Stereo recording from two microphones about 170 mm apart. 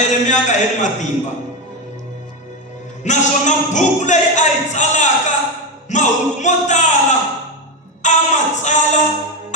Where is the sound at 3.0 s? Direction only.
45° left (ahead or behind).